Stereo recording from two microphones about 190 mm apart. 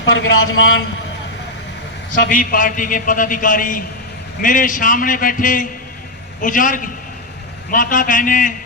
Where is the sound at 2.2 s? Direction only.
45° left (ahead or behind).